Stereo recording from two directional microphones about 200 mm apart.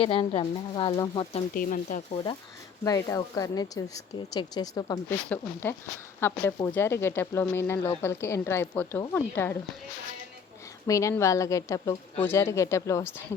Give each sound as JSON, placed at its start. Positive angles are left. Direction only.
{"t": 0.0, "sound": "speech", "side_deg": 25}
{"t": 1.5, "sound": "speech", "side_deg": 45}
{"t": 2.8, "sound": "a woman's voice", "side_deg": 15}
{"t": 10.8, "sound": "a woman's voice", "side_deg": 15}